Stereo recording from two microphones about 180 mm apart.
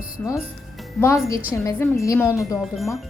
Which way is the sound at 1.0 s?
15° left (ahead or behind).